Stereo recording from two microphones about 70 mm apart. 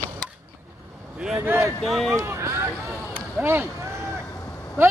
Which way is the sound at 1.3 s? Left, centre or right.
Right.